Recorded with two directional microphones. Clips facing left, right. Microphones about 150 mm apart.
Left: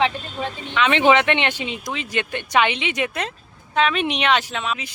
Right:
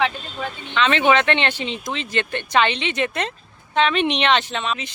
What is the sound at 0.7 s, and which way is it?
Speech, 15° left (ahead or behind).